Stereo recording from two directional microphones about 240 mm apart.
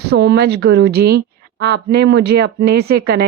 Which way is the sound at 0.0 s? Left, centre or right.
Right.